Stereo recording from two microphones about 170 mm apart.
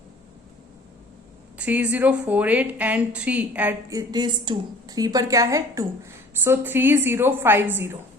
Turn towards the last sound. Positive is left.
turn(degrees=-15)  # may be behind; listen again after turning